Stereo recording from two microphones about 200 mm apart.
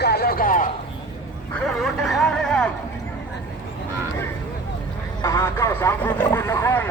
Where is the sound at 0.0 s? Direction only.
50° left (ahead or behind).